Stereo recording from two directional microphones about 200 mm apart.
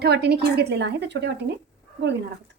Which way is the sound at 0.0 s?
55° right (ahead or behind).